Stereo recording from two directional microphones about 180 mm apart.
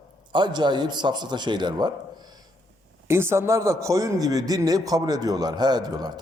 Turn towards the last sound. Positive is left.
turn(degrees=-20)  # may be behind; listen again after turning